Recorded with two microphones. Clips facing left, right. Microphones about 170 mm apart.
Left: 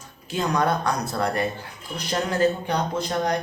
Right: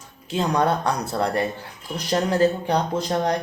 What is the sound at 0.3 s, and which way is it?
Speech, 30° right (ahead or behind).